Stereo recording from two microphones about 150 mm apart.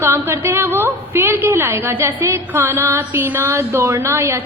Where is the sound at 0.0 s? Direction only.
15° right (ahead or behind).